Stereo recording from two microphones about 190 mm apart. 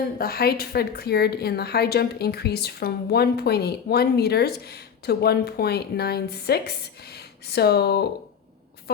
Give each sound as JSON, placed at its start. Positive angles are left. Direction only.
{"t": 0.2, "sound": "a woman's voice", "side_deg": 55}